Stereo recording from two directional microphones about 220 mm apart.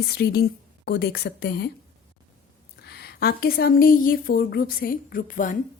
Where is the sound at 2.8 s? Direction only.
45° left (ahead or behind).